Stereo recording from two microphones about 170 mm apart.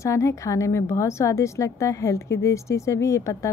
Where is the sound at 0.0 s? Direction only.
15° left (ahead or behind).